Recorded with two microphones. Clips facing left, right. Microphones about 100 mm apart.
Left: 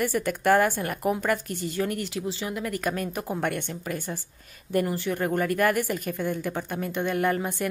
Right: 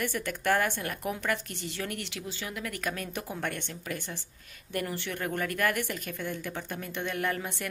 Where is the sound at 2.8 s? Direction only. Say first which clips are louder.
Left 6 dB; 45° left (ahead or behind).